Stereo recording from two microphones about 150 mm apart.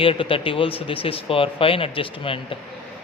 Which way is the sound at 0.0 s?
35° left (ahead or behind).